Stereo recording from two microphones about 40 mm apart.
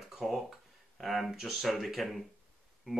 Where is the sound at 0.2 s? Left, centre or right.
Centre.